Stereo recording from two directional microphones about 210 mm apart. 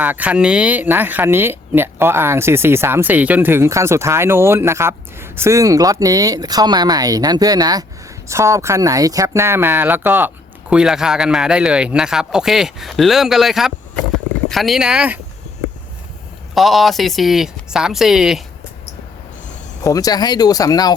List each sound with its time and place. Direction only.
0.0 s speech: 5° right (ahead or behind)
16.6 s speech: centre (ahead or behind)
19.8 s speech: 15° left (ahead or behind)